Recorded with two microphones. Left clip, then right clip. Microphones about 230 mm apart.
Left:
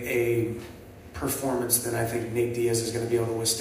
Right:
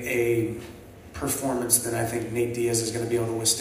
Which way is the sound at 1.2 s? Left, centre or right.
Right.